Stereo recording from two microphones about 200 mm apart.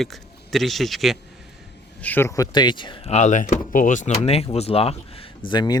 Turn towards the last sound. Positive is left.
turn(degrees=20)  # may be behind; listen again after turning